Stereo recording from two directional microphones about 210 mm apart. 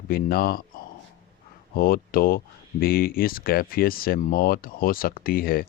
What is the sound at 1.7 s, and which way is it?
Speech, 45° left (ahead or behind).